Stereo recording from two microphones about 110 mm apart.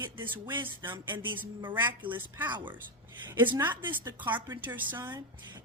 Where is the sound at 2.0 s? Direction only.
15° right (ahead or behind).